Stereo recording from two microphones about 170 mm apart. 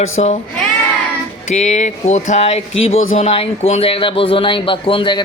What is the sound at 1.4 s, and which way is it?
Speech, 45° left (ahead or behind).